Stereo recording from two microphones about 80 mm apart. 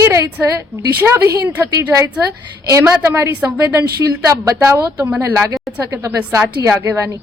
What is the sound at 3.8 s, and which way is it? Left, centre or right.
A woman's voice, right.